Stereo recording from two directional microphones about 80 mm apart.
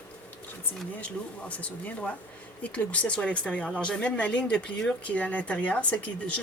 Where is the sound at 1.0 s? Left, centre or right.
Centre.